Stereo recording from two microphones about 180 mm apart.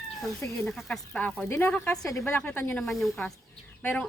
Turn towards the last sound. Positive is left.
turn(degrees=10)  # may be behind; listen again after turning